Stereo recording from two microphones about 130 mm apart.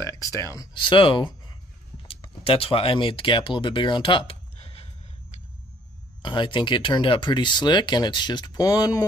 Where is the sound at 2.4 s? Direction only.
45° left (ahead or behind).